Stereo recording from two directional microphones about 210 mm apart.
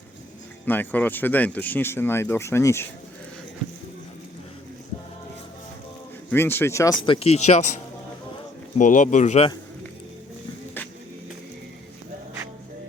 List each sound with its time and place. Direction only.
0.6 s speech: 10° left (ahead or behind)
6.3 s speech: 10° left (ahead or behind)
7.0 s speech: 25° left (ahead or behind)
8.8 s speech: 40° left (ahead or behind)